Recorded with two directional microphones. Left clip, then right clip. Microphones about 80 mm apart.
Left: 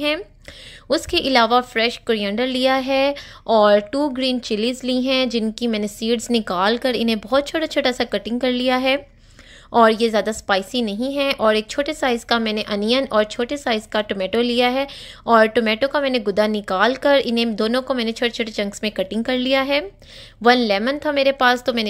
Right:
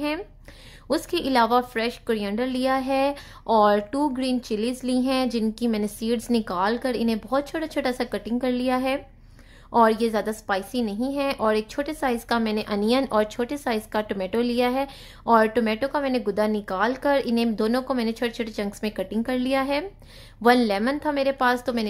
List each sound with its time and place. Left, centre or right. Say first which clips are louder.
0.8 s a woman's voice: left 6 dB; centre
4.2 s a woman's voice: left 5 dB; left